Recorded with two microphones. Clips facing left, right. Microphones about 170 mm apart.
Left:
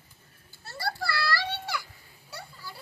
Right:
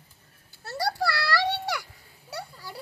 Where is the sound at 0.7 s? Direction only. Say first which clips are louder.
Right 5 dB; 75° right (ahead or behind).